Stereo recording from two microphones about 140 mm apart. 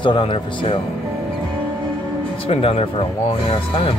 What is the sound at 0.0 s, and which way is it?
Speech, 40° left (ahead or behind).